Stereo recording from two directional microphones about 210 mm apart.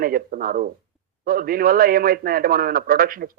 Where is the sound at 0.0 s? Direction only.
45° right (ahead or behind).